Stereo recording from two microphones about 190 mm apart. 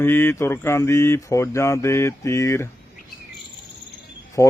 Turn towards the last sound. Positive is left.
turn(degrees=15)  # may be behind; listen again after turning